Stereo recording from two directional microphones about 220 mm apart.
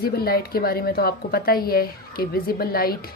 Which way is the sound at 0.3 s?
45° left (ahead or behind).